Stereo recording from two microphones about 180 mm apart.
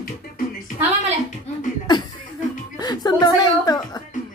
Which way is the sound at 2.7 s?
20° left (ahead or behind).